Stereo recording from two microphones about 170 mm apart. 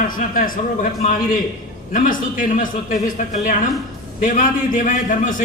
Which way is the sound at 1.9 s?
50° left (ahead or behind).